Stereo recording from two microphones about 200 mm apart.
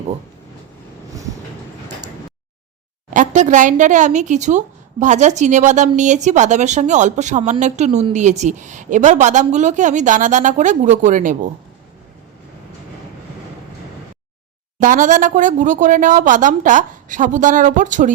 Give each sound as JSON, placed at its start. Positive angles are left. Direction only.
{"t": 3.1, "sound": "a woman's voice", "side_deg": -40}
{"t": 14.8, "sound": "a woman's voice", "side_deg": -40}